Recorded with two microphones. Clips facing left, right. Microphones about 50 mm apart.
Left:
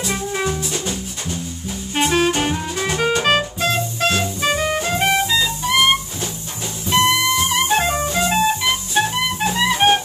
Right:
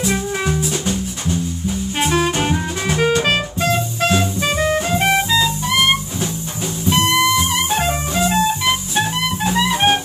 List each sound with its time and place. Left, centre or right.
0.0 s music: centre
2.0 s music: centre
6.9 s music: centre